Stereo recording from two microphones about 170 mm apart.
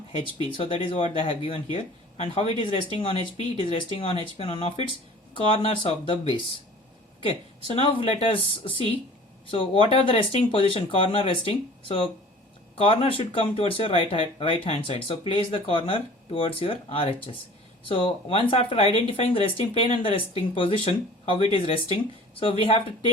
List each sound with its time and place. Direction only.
0.5 s speech: 30° left (ahead or behind)